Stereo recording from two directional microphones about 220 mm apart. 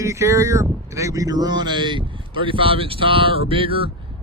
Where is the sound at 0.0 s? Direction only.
15° right (ahead or behind).